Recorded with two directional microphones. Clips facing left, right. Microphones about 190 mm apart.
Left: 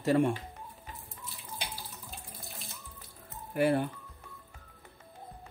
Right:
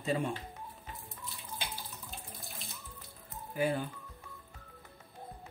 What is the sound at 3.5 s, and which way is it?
Speech, 65° left (ahead or behind).